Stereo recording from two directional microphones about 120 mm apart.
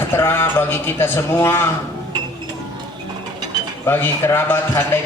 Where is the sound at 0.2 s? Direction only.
20° left (ahead or behind).